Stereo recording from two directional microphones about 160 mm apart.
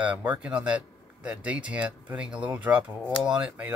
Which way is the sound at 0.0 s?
10° right (ahead or behind).